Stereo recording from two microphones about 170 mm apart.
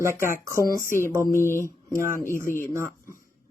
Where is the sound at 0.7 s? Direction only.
50° left (ahead or behind).